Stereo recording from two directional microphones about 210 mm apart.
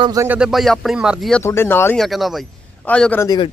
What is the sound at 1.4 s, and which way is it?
A man's voice, 10° left (ahead or behind).